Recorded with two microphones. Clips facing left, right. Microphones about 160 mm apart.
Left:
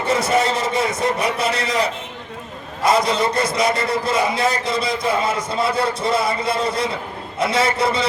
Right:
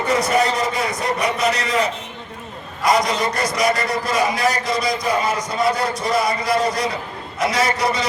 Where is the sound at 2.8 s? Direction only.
30° left (ahead or behind).